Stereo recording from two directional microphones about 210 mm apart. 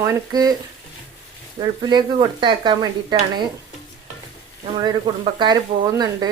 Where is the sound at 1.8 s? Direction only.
20° right (ahead or behind).